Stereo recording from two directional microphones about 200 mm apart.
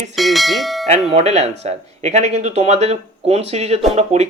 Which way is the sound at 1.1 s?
35° right (ahead or behind).